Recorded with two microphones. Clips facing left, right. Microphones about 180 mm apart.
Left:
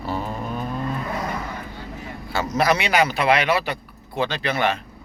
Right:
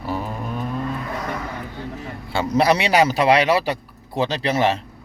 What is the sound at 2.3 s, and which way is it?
Speech, 30° right (ahead or behind).